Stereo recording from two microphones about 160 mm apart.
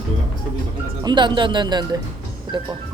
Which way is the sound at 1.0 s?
30° right (ahead or behind).